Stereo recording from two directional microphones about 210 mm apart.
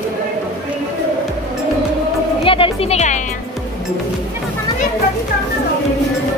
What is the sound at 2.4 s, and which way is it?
Music, 25° left (ahead or behind).